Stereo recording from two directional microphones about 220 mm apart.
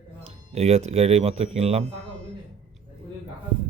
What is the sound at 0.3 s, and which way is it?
Speech, 30° right (ahead or behind).